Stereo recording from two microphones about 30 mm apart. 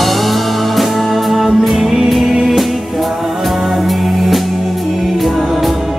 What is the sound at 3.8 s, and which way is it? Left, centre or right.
Music, centre.